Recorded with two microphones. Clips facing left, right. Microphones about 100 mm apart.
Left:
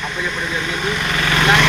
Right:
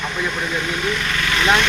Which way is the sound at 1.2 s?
55° left (ahead or behind).